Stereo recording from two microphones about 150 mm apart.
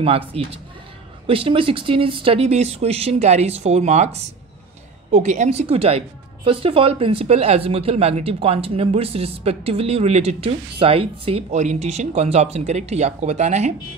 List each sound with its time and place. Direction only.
0.0 s a woman's voice: 40° right (ahead or behind)